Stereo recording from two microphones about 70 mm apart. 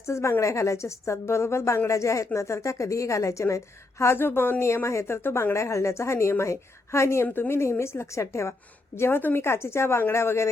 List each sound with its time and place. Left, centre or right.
0.0 s a woman's voice: left